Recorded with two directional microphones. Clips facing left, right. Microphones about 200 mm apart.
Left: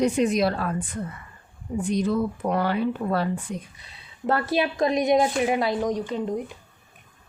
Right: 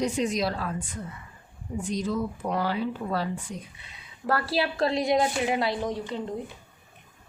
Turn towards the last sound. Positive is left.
turn(degrees=20)  # may be behind; listen again after turning